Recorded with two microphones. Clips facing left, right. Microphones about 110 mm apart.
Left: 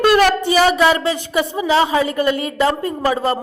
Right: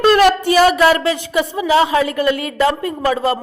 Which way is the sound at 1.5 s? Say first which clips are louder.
Right 2 dB; 30° left (ahead or behind).